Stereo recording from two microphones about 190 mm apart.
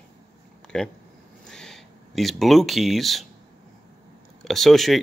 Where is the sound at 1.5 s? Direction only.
5° left (ahead or behind).